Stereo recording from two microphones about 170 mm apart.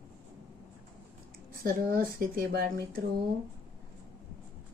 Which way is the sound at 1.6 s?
60° right (ahead or behind).